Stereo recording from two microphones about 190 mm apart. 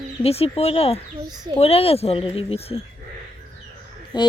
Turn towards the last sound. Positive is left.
turn(degrees=25)  # may be behind; listen again after turning